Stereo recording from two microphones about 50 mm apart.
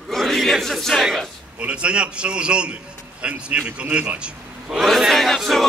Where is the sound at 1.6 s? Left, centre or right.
Right.